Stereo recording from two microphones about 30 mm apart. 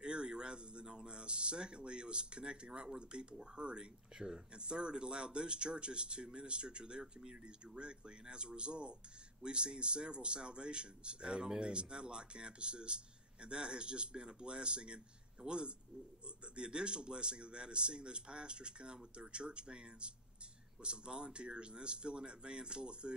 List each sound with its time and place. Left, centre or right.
0.0 s speech: right